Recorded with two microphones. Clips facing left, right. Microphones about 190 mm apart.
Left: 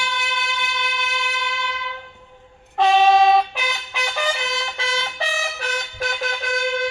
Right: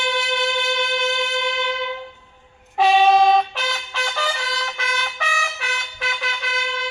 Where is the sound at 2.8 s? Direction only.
5° right (ahead or behind).